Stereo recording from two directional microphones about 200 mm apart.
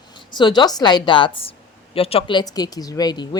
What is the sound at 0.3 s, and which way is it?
Speech, 20° left (ahead or behind).